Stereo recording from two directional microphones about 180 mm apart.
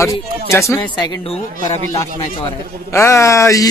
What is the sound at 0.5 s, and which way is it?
Speech, 15° left (ahead or behind).